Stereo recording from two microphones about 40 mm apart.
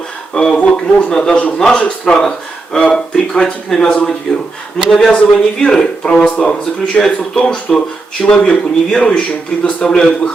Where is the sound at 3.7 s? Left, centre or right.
Centre.